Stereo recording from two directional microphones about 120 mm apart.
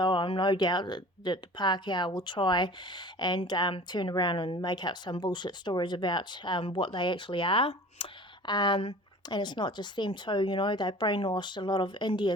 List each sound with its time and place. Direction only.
0.0 s speech: 40° left (ahead or behind)
8.4 s speech: 40° left (ahead or behind)